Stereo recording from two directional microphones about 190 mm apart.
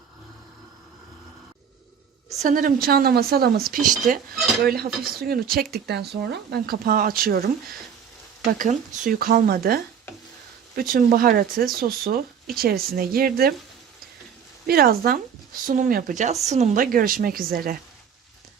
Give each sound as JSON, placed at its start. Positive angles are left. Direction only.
{"t": 2.4, "sound": "speech", "side_deg": -45}
{"t": 4.6, "sound": "cutlery", "side_deg": -55}
{"t": 5.1, "sound": "speech", "side_deg": -50}
{"t": 14.7, "sound": "speech", "side_deg": -50}